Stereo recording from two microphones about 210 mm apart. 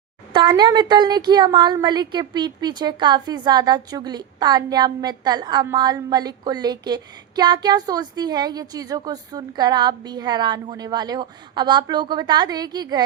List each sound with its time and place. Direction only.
0.3 s a woman's voice: 20° right (ahead or behind)